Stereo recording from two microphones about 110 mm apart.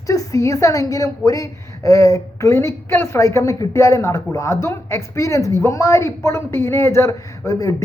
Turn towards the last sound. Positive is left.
turn(degrees=30)  # may be behind; listen again after turning